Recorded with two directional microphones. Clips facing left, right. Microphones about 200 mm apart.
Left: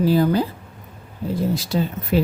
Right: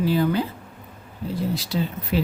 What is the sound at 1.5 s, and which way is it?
Speech, 45° left (ahead or behind).